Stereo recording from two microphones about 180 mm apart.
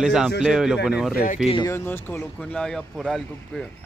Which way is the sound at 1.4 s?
25° left (ahead or behind).